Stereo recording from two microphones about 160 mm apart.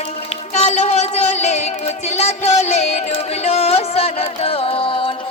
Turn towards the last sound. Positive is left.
turn(degrees=35)  # may be behind; listen again after turning